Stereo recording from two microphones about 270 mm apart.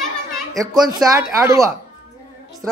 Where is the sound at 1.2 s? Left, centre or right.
Centre.